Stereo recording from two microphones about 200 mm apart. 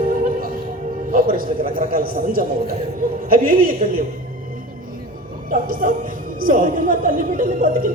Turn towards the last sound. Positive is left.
turn(degrees=-45)  # may be behind; listen again after turning